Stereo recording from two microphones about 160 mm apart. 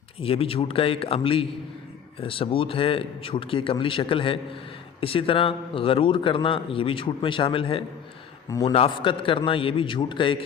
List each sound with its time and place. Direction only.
0.2 s a man's voice: 35° left (ahead or behind)